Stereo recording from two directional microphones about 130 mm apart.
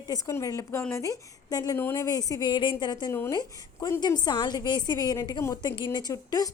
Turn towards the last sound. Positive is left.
turn(degrees=30)  # may be behind; listen again after turning